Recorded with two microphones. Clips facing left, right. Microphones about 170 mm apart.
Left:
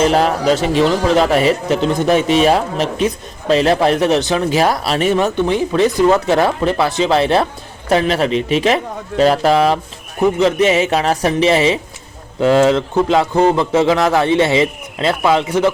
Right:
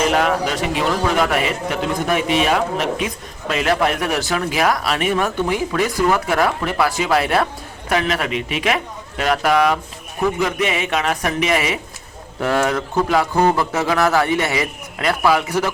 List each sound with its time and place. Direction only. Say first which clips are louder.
0.0 s speech: left 4 dB; 35° left (ahead or behind)